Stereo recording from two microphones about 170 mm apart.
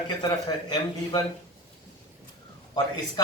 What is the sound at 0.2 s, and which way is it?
A man's voice, 25° left (ahead or behind).